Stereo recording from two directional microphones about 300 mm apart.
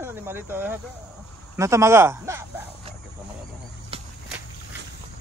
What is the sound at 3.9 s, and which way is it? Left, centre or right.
Walk, centre.